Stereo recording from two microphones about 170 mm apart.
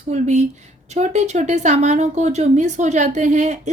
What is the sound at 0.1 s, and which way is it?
Speech, 45° right (ahead or behind).